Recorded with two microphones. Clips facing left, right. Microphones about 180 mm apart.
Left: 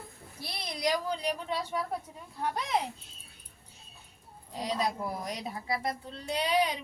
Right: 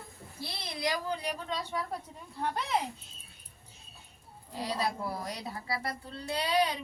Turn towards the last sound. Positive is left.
turn(degrees=15)  # may be behind; listen again after turning